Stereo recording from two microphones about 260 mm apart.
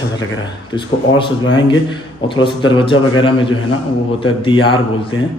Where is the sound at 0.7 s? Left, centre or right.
Centre.